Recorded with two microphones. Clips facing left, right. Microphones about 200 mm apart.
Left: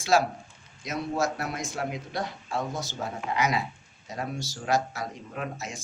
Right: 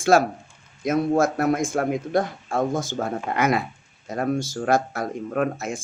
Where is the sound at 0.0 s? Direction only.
50° right (ahead or behind).